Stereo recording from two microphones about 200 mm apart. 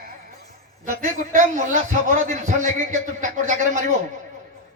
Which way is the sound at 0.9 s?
40° right (ahead or behind).